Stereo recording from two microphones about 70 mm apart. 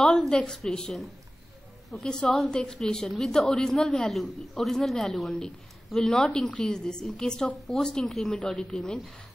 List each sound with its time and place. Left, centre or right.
0.0 s a woman's voice: centre
8.4 s a woman's voice: centre